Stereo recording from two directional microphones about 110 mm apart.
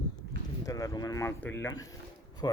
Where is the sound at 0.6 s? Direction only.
30° left (ahead or behind).